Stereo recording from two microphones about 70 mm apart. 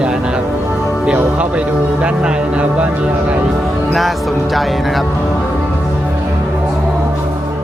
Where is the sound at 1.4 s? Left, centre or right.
Centre.